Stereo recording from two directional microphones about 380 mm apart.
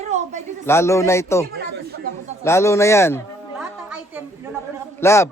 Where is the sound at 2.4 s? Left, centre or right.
Centre.